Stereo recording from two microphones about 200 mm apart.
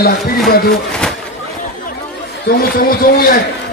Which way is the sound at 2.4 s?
50° left (ahead or behind).